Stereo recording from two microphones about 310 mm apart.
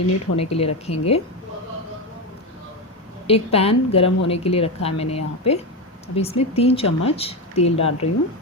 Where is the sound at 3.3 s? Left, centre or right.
Centre.